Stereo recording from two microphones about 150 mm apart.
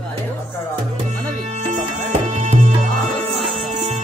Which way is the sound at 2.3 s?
45° right (ahead or behind).